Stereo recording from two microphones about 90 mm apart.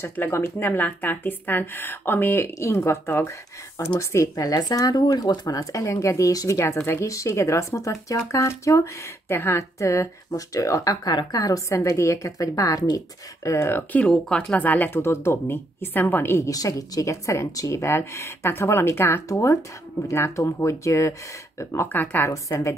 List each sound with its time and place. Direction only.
0.0 s a woman's voice: 25° left (ahead or behind)
21.9 s a woman's voice: 20° left (ahead or behind)
22.3 s a woman's voice: 35° left (ahead or behind)